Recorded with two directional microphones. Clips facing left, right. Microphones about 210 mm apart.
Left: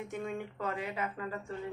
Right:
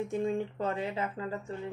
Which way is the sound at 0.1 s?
30° right (ahead or behind).